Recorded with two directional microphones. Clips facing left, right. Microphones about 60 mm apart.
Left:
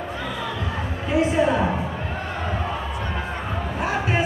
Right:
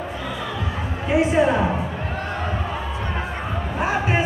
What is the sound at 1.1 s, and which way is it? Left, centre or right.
Speech, centre.